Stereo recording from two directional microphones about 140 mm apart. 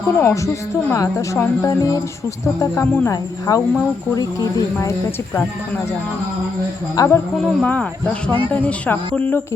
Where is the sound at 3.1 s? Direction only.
25° left (ahead or behind).